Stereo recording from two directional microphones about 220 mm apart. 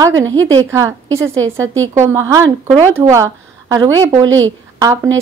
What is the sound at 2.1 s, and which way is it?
A woman's voice, 15° right (ahead or behind).